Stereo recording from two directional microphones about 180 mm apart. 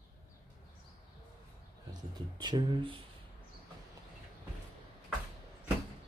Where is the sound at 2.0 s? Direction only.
25° right (ahead or behind).